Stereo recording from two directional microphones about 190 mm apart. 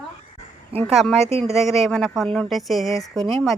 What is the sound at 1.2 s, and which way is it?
Speech, 35° right (ahead or behind).